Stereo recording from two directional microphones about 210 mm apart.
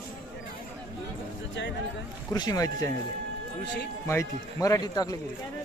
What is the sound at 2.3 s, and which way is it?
Speech, 20° left (ahead or behind).